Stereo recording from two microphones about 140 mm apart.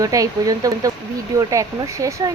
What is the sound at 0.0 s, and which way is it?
Speech, 25° right (ahead or behind).